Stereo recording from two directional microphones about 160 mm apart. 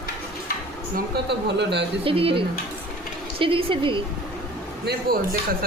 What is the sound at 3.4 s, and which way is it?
Speech, 35° right (ahead or behind).